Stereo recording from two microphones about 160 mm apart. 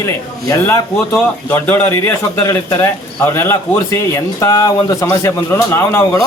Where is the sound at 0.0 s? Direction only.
20° left (ahead or behind).